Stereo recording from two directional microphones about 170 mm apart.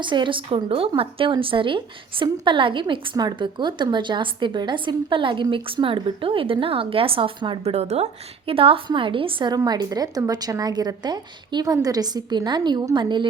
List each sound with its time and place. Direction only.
0.0 s a woman's voice: 30° right (ahead or behind)